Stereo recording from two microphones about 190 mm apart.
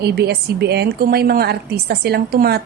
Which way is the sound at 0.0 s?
60° right (ahead or behind).